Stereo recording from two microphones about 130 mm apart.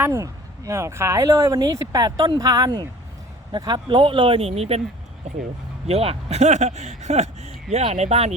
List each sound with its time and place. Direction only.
0.0 s speech: 20° right (ahead or behind); by 4.8 s 50° right (ahead or behind)
5.9 s speech: 50° right (ahead or behind)